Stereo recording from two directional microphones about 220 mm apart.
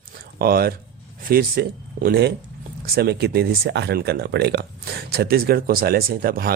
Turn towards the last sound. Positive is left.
turn(degrees=-40)  # may be behind; listen again after turning